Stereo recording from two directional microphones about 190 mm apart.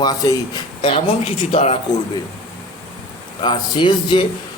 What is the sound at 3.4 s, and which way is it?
Speech, 25° left (ahead or behind).